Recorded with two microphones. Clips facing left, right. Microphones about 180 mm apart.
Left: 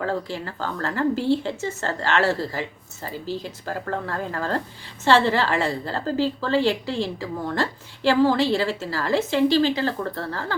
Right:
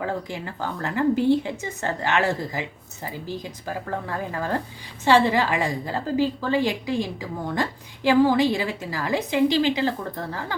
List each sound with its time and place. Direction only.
0.0 s a woman's voice: 15° right (ahead or behind)